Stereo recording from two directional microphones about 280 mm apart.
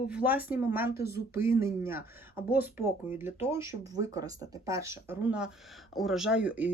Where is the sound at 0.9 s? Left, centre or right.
Left.